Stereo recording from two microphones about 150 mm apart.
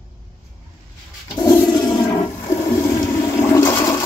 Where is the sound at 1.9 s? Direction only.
20° left (ahead or behind).